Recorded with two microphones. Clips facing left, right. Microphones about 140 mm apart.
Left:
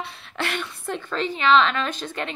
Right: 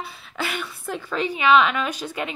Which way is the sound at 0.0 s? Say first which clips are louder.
Even; 5° right (ahead or behind).